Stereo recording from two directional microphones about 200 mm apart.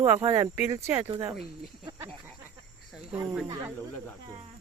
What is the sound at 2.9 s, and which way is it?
Cricket, 5° right (ahead or behind).